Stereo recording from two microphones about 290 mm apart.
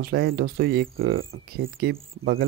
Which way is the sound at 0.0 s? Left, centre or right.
Right.